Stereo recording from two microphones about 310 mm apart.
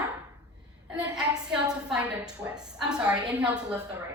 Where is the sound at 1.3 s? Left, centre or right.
Centre.